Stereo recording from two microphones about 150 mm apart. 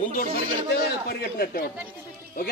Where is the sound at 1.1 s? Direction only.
85° left.